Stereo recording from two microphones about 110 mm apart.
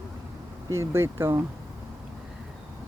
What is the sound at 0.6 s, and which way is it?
Speech, 25° right (ahead or behind).